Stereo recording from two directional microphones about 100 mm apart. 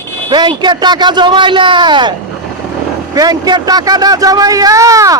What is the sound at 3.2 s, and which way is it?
A man's voice, 40° right (ahead or behind).